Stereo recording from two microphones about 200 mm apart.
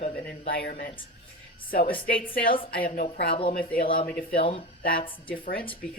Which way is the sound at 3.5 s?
45° left (ahead or behind).